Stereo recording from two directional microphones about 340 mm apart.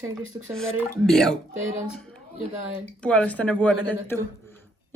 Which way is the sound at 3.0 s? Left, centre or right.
Centre.